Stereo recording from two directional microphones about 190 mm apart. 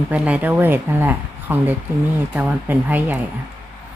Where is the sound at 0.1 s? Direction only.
10° right (ahead or behind).